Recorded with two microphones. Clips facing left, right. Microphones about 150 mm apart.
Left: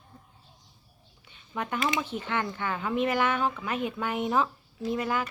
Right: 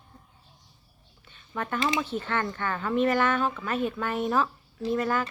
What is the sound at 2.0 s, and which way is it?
Speech, 10° left (ahead or behind).